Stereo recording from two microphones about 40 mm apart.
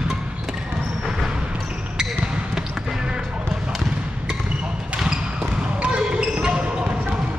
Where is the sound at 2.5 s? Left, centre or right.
Centre.